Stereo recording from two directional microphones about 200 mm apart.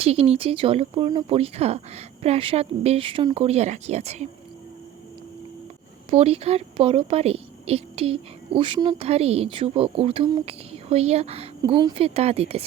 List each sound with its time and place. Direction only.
0.0 s a woman's voice: 30° right (ahead or behind)
6.1 s a woman's voice: 30° right (ahead or behind)